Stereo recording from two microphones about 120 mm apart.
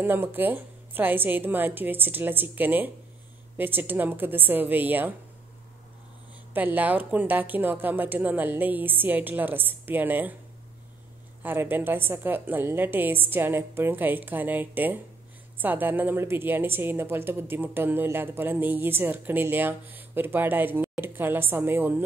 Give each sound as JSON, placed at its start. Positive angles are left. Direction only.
{"t": 0.0, "sound": "a woman's voice", "side_deg": -15}
{"t": 6.5, "sound": "a woman's voice", "side_deg": -15}
{"t": 11.4, "sound": "a woman's voice", "side_deg": -15}